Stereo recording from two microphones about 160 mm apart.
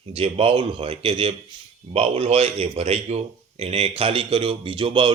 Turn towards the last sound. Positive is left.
turn(degrees=-30)  # may be behind; listen again after turning